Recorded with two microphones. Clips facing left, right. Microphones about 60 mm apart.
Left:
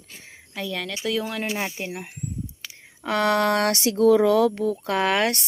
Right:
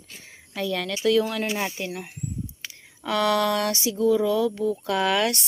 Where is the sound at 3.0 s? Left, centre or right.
Left.